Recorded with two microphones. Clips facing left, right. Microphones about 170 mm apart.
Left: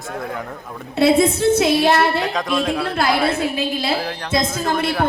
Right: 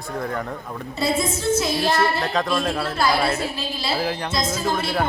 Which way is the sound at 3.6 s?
55° left (ahead or behind).